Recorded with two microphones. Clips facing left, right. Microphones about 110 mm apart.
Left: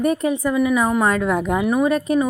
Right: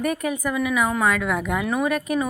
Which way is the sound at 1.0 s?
35° left (ahead or behind).